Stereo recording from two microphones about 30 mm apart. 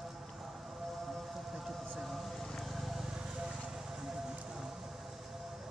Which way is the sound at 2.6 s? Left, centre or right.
Centre.